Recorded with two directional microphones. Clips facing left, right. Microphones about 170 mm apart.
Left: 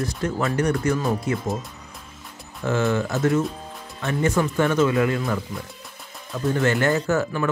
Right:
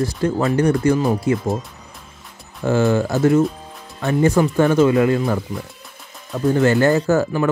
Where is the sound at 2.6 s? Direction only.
35° right (ahead or behind).